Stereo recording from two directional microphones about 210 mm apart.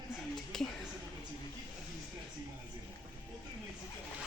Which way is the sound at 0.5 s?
Centre (ahead or behind).